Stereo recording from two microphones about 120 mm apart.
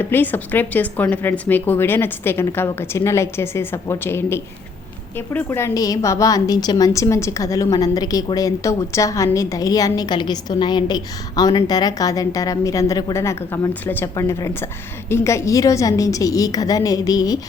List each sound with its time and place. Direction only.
0.0 s a woman's voice: 15° left (ahead or behind); by 17.4 s 30° left (ahead or behind)